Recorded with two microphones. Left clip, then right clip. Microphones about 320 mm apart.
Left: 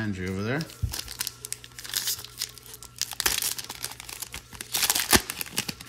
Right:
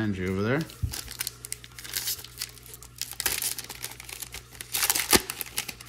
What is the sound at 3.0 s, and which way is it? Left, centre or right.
Crumpling, centre.